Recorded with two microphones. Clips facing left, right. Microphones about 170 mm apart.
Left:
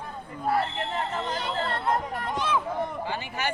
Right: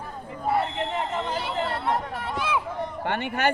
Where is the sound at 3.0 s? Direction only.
65° right (ahead or behind).